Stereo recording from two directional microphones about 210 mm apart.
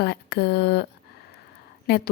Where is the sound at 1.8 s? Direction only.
50° left (ahead or behind).